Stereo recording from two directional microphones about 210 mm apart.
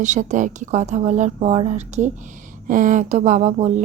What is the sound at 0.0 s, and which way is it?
Speech, 35° right (ahead or behind).